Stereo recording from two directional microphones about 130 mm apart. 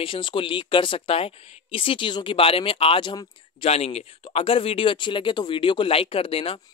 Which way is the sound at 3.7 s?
55° left (ahead or behind).